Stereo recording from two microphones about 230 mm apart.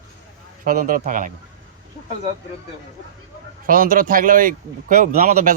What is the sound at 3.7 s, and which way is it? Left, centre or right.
Speech, right.